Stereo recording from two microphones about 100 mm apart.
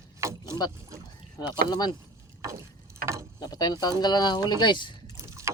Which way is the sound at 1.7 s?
40° left (ahead or behind).